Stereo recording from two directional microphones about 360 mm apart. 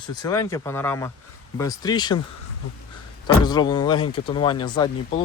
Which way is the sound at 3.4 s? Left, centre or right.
Centre.